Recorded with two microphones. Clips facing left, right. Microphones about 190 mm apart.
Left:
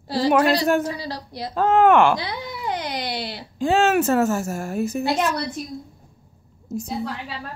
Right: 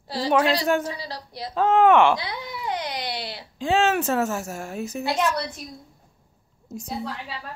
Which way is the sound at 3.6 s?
5° left (ahead or behind).